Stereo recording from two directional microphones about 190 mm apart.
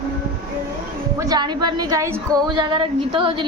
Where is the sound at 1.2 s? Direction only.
20° right (ahead or behind).